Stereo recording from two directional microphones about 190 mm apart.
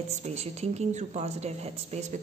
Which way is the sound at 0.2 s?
35° right (ahead or behind).